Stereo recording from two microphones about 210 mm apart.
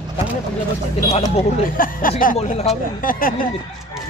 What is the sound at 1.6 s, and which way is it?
Speech, 40° left (ahead or behind).